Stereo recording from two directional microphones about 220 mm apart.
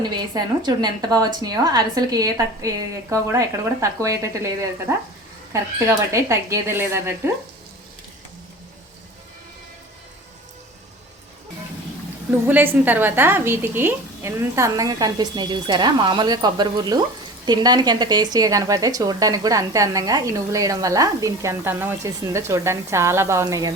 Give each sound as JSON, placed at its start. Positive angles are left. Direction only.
{"t": 0.2, "sound": "speech", "side_deg": -20}
{"t": 6.1, "sound": "speech", "side_deg": -15}
{"t": 12.5, "sound": "speech", "side_deg": -10}